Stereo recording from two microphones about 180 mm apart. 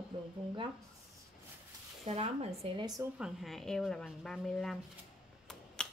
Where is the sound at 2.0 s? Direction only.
35° right (ahead or behind).